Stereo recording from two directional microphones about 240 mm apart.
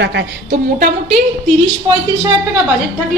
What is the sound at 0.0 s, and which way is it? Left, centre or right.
Speech, right.